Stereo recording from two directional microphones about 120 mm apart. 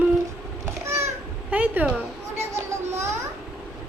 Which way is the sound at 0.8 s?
20° right (ahead or behind).